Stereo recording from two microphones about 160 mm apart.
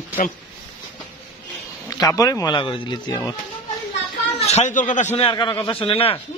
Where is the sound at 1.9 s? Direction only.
20° left (ahead or behind).